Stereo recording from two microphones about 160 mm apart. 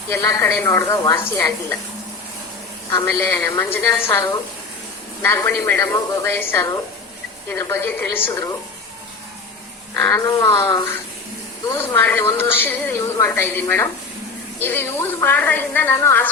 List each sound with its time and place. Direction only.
0.1 s a woman's voice: 15° left (ahead or behind)
2.9 s a woman's voice: 15° left (ahead or behind)
9.9 s a woman's voice: 15° left (ahead or behind)